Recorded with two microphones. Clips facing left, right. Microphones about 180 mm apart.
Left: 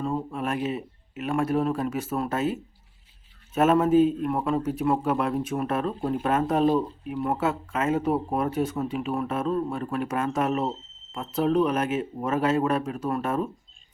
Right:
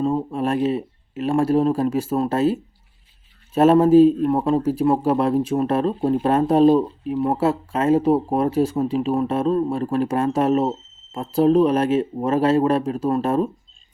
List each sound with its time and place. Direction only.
0.0 s a man's voice: 30° right (ahead or behind)